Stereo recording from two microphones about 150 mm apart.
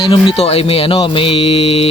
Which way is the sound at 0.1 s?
40° left (ahead or behind).